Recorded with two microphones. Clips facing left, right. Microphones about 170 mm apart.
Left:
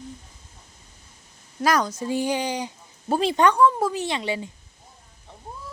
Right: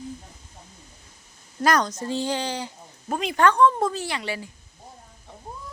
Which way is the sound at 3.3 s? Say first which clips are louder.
Right 1 dB; 15° left (ahead or behind).